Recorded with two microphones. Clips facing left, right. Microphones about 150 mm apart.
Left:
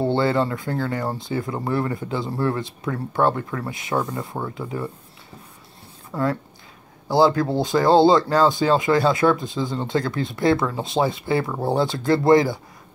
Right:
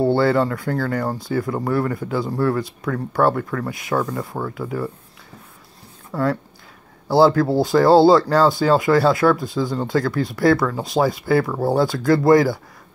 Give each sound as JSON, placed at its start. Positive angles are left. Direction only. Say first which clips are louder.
{"t": 0.2, "sound": "speech", "louder": "right 3 dB", "side_deg": 20}
{"t": 6.1, "sound": "speech", "louder": "right 2 dB", "side_deg": 15}